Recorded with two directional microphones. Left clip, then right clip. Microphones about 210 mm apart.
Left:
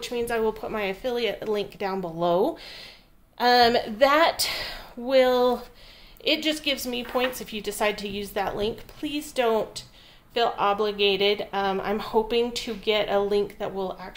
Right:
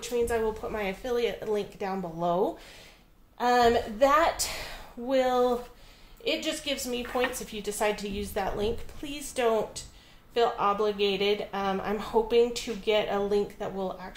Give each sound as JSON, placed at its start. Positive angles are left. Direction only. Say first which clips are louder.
{"t": 0.0, "sound": "speech", "louder": "left 2 dB", "side_deg": 35}